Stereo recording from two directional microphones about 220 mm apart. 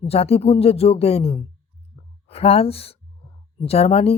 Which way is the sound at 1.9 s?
25° left (ahead or behind).